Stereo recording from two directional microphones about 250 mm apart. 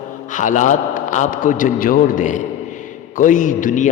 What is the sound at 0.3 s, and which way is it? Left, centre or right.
A man's voice, left.